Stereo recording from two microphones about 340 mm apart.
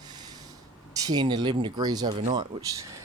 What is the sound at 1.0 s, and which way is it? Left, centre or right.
Speech, centre.